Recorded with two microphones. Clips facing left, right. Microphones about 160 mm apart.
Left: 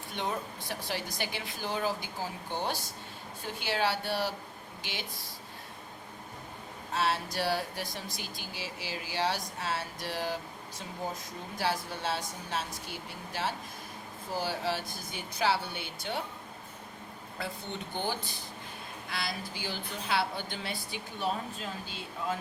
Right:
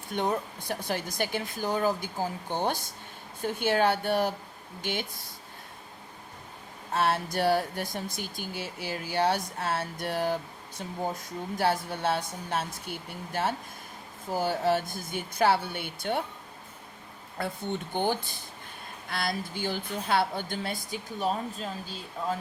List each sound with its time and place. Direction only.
0.1 s a woman's voice: 50° right (ahead or behind)
6.9 s speech: 55° right (ahead or behind)
11.5 s a woman's voice: 55° right (ahead or behind)
17.3 s speech: 55° right (ahead or behind)